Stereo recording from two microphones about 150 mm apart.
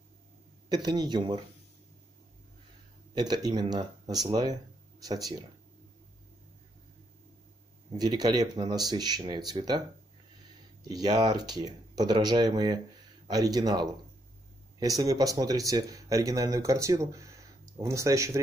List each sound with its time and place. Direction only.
0.8 s speech: 30° right (ahead or behind)
3.2 s speech: 25° right (ahead or behind)
8.0 s speech: 25° right (ahead or behind)